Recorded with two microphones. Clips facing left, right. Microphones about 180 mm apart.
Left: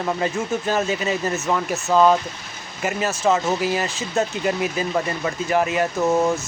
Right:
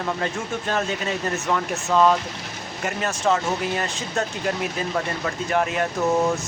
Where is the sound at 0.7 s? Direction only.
5° left (ahead or behind).